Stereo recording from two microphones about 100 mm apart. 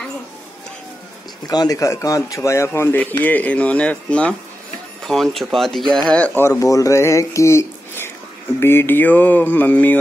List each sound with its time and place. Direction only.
1.5 s speech: 40° left (ahead or behind); by 4.4 s 10° left (ahead or behind)
5.0 s speech: centre (ahead or behind)
6.0 s speech: 15° left (ahead or behind)
6.4 s speech: 35° left (ahead or behind); by 9.9 s 20° left (ahead or behind)